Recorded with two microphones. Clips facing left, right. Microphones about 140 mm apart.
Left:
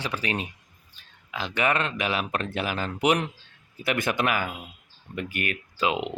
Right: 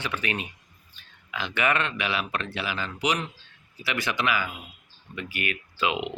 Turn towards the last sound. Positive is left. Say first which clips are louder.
# left 1 dB
turn(degrees=40)  # may be behind; listen again after turning